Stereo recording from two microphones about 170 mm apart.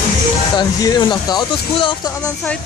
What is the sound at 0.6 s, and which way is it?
Speech, 25° left (ahead or behind).